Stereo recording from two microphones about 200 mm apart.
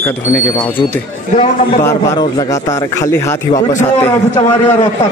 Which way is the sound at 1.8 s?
15° left (ahead or behind).